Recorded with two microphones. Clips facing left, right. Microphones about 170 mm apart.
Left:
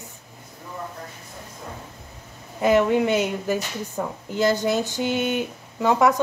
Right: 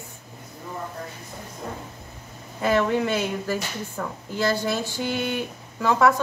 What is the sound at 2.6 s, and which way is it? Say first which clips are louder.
A woman's voice: left 3 dB; 15° left (ahead or behind).